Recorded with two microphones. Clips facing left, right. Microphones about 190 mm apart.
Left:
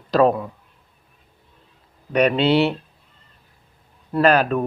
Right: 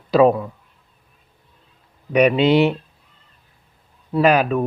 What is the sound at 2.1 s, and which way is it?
Speech, 10° right (ahead or behind).